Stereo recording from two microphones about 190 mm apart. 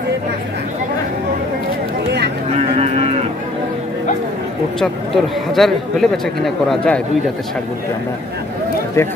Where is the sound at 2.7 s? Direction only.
30° right (ahead or behind).